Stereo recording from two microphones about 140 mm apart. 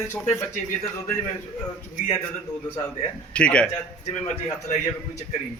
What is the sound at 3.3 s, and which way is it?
Speech, 5° left (ahead or behind).